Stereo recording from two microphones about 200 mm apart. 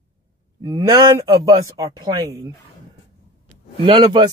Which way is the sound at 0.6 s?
15° right (ahead or behind).